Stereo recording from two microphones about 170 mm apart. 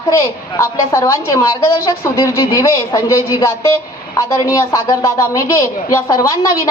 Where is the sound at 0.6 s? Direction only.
15° left (ahead or behind).